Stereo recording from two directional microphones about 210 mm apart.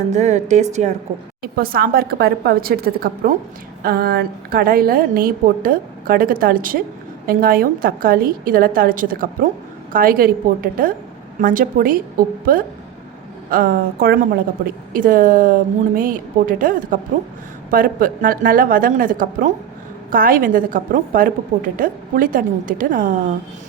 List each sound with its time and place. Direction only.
0.1 s a woman's voice: 35° right (ahead or behind)
1.4 s a woman's voice: 45° right (ahead or behind)
13.5 s a woman's voice: 45° right (ahead or behind)